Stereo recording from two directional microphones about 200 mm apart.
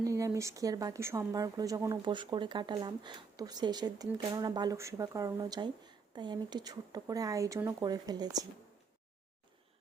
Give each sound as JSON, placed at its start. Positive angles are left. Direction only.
{"t": 0.0, "sound": "a woman's voice", "side_deg": -15}